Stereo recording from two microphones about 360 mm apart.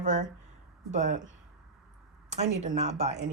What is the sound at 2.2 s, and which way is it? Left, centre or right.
Speech, centre.